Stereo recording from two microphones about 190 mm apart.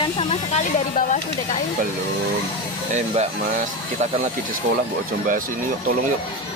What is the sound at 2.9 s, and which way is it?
Speech, 35° right (ahead or behind).